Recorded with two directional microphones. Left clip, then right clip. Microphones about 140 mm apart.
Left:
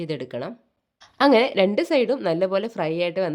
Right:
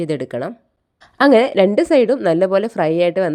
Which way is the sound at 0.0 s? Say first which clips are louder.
Right 7 dB; 50° right (ahead or behind).